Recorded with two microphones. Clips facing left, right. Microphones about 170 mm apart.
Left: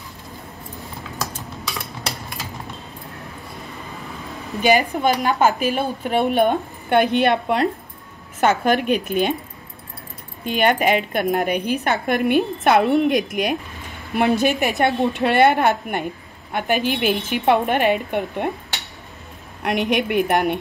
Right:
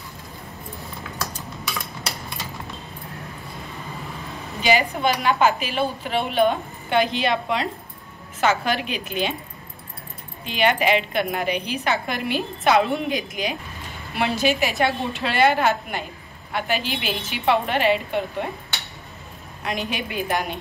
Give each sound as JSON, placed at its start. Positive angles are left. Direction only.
{"t": 4.6, "sound": "a woman's voice", "side_deg": 50}
{"t": 10.4, "sound": "a woman's voice", "side_deg": 50}
{"t": 19.6, "sound": "a woman's voice", "side_deg": 65}